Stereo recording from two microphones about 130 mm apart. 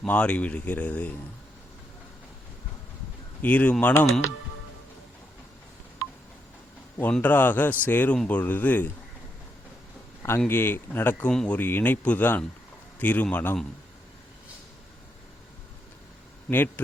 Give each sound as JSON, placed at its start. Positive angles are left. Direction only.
{"t": 0.0, "sound": "speech", "side_deg": 10}
{"t": 3.4, "sound": "speech", "side_deg": 10}
{"t": 7.0, "sound": "speech", "side_deg": 15}
{"t": 10.4, "sound": "speech", "side_deg": 15}
{"t": 16.5, "sound": "speech", "side_deg": 15}